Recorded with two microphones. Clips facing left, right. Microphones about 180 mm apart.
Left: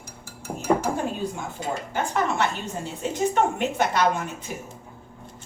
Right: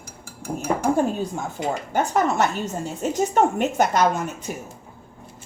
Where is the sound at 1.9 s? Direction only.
45° right (ahead or behind).